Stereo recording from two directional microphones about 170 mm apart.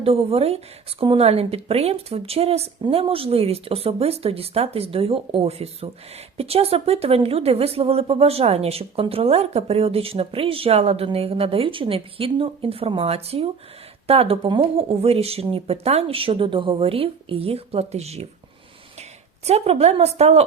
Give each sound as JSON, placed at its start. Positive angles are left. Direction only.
{"t": 0.0, "sound": "speech", "side_deg": -35}
{"t": 19.5, "sound": "speech", "side_deg": -40}